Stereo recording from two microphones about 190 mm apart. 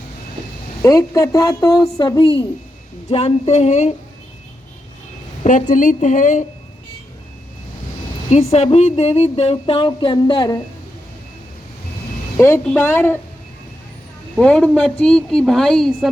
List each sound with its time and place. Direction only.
0.8 s a woman's voice: 20° left (ahead or behind); by 3.9 s 35° left (ahead or behind)
5.4 s speech: 40° left (ahead or behind)
8.3 s speech: 35° left (ahead or behind)
12.4 s speech: 15° left (ahead or behind)
14.3 s a woman's voice: 5° left (ahead or behind)